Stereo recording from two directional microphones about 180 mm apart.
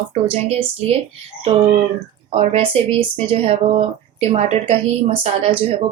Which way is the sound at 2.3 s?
30° right (ahead or behind).